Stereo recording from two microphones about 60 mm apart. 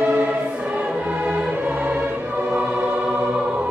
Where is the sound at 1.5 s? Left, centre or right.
Right.